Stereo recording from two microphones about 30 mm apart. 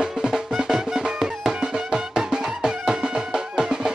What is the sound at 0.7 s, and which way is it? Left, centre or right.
Music, centre.